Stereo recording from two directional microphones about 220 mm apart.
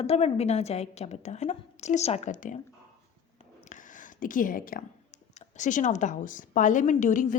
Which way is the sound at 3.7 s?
35° left (ahead or behind).